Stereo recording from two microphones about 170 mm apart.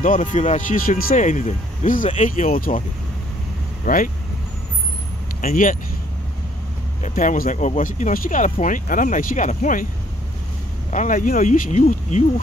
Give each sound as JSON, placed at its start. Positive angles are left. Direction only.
{"t": 0.0, "sound": "speech", "side_deg": 50}
{"t": 3.8, "sound": "speech", "side_deg": 50}
{"t": 5.4, "sound": "speech", "side_deg": 55}
{"t": 7.0, "sound": "speech", "side_deg": 50}
{"t": 10.9, "sound": "speech", "side_deg": 45}